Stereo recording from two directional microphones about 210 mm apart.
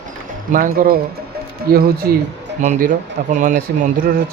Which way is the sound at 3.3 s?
35° right (ahead or behind).